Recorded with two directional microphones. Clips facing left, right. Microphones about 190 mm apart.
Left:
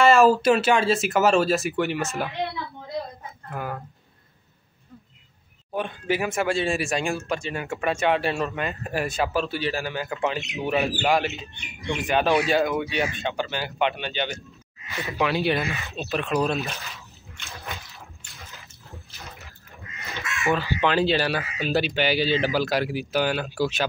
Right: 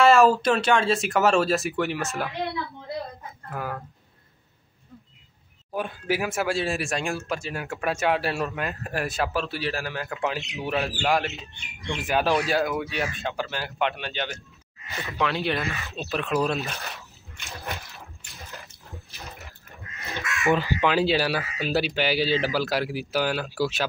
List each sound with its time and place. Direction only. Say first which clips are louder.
0.0 s speech: left 1 dB; centre (ahead or behind)
3.4 s speech: even; centre (ahead or behind)
5.7 s speech: left 1 dB; 5° right (ahead or behind)
20.1 s crow: right 2 dB; 15° right (ahead or behind)
20.8 s speech: left 3 dB; 5° right (ahead or behind)